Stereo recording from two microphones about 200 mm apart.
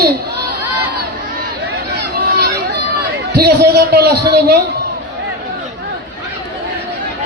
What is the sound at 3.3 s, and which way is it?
A man's voice, 55° right (ahead or behind).